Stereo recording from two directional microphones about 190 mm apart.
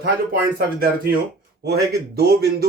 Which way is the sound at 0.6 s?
50° right (ahead or behind).